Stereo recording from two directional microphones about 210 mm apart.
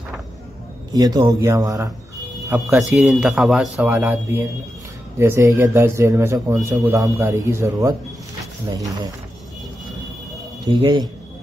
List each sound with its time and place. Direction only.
0.9 s a man's voice: 20° right (ahead or behind)
2.7 s a man's voice: centre (ahead or behind)
10.6 s speech: 20° right (ahead or behind)